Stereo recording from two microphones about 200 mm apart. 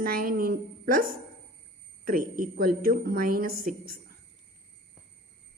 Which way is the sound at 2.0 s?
45° right (ahead or behind).